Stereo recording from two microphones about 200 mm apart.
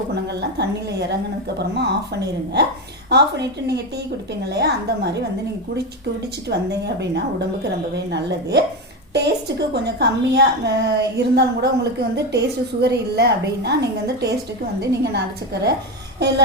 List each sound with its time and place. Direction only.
0.6 s a woman's voice: 55° right (ahead or behind)
6.5 s a woman's voice: 55° right (ahead or behind)